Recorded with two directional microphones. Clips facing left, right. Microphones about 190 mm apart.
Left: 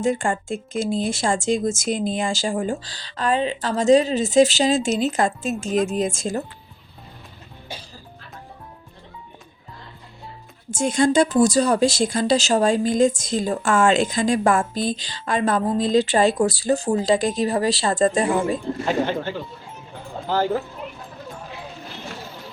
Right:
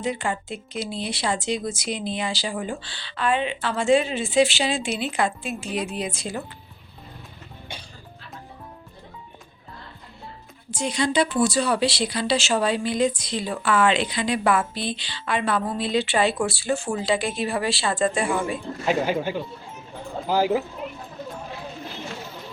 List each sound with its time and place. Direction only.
0.0 s speech: 45° left (ahead or behind)
10.7 s speech: 50° left (ahead or behind)
18.9 s speech: 5° right (ahead or behind)